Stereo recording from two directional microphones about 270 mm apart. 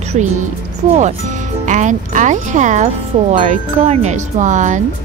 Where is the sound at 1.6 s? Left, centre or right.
Right.